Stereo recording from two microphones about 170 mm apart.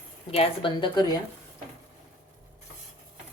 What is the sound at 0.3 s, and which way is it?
Speech, 30° left (ahead or behind).